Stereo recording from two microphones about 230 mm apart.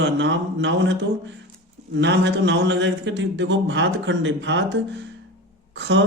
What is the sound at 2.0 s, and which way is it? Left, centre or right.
A man's voice, right.